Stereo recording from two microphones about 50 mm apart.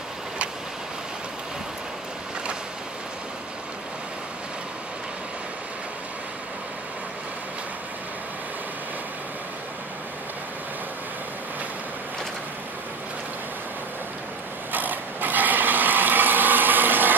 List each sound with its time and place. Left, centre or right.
14.7 s ratchet: right